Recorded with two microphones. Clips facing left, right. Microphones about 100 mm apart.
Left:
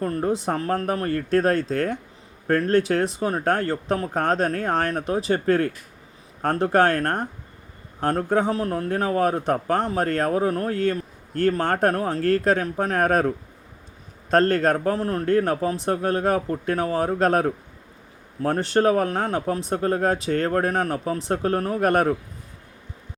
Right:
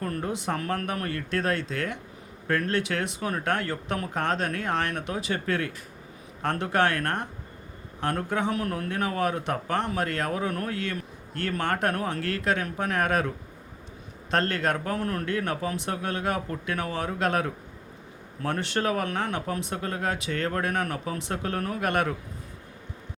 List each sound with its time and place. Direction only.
0.0 s a man's voice: 35° left (ahead or behind)